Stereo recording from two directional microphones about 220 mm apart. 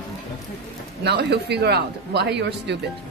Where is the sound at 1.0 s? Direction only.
50° right (ahead or behind).